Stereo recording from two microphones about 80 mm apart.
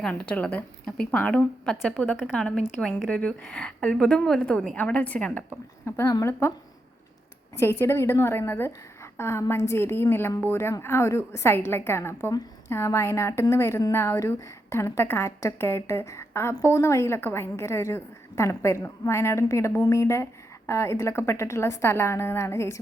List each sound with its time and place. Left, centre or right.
0.0 s a woman's voice: centre
5.8 s a woman's voice: left
7.6 s a woman's voice: left